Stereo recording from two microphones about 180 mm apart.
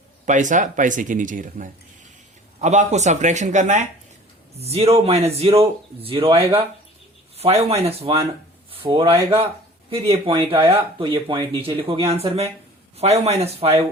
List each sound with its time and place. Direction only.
0.3 s speech: 45° right (ahead or behind)